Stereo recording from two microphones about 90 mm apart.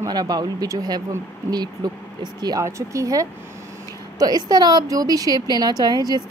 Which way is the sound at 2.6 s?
35° right (ahead or behind).